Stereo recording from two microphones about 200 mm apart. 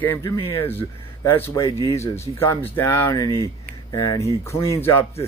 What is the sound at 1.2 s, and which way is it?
Speech, 15° left (ahead or behind).